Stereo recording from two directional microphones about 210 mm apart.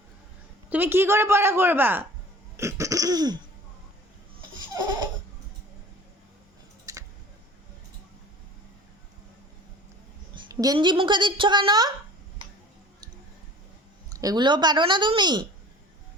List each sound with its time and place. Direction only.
0.7 s a woman's voice: 10° right (ahead or behind)
2.6 s throat clearing: 15° right (ahead or behind)
4.7 s a sound: 20° right (ahead or behind)
6.9 s a sound: 15° right (ahead or behind)
10.3 s a woman's voice: 20° right (ahead or behind)
14.1 s a woman's voice: 15° right (ahead or behind)